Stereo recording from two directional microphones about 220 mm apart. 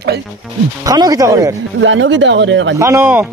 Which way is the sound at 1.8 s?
55° right (ahead or behind).